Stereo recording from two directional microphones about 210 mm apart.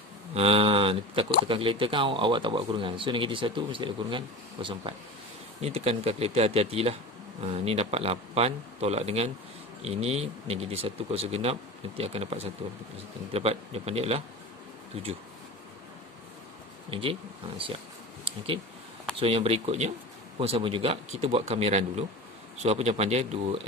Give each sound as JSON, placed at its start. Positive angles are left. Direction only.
{"t": 0.3, "sound": "speech", "side_deg": -30}
{"t": 16.9, "sound": "speech", "side_deg": -25}